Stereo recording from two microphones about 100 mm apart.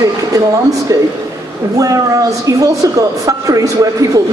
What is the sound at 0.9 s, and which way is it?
Speech, 35° right (ahead or behind).